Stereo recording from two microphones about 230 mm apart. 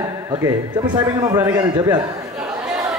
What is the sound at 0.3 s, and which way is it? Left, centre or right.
A man's voice, centre.